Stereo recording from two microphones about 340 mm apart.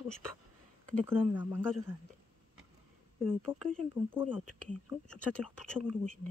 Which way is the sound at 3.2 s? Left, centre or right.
Centre.